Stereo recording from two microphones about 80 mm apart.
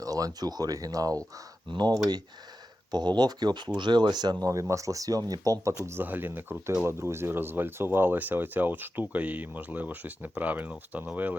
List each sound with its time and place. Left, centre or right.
0.0 s speech: right
2.9 s speech: right
4.4 s speech: right
5.8 s speech: right